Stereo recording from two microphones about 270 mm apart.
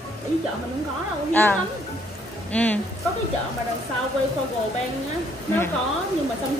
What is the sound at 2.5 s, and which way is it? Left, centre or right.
Speech, centre.